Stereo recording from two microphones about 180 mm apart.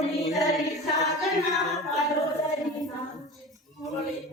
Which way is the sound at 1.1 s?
Centre (ahead or behind).